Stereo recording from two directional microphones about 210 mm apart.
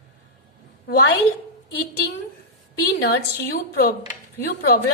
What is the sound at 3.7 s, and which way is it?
A woman's voice, 45° left (ahead or behind).